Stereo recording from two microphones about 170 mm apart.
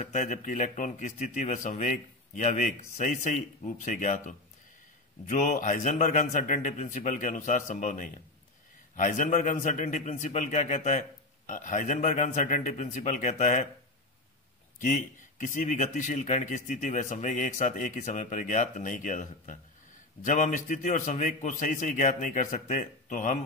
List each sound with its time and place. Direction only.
0.0 s speech: 50° left (ahead or behind)
14.8 s speech: 50° left (ahead or behind)